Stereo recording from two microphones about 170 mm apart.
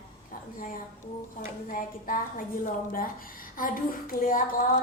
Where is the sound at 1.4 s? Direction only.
55° left (ahead or behind).